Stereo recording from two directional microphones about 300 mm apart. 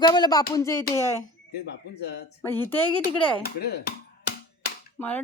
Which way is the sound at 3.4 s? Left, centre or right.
Left.